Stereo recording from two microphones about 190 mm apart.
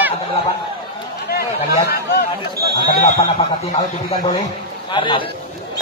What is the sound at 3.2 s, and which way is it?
Speech, 35° left (ahead or behind).